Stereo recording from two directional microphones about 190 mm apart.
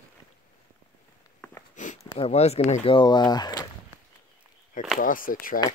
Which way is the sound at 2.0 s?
30° left (ahead or behind).